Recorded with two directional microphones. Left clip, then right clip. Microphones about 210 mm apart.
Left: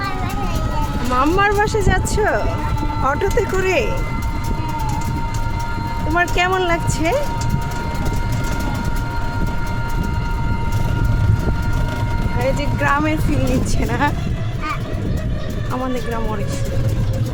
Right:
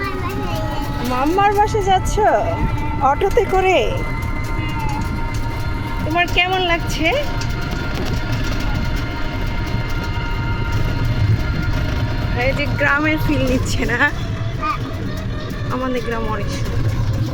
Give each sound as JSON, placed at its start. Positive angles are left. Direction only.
{"t": 1.2, "sound": "speech", "side_deg": 15}
{"t": 3.0, "sound": "speech", "side_deg": 0}
{"t": 6.1, "sound": "speech", "side_deg": 20}
{"t": 12.4, "sound": "speech", "side_deg": 15}